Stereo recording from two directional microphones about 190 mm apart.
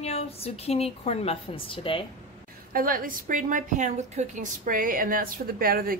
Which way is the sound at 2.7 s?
50° right (ahead or behind).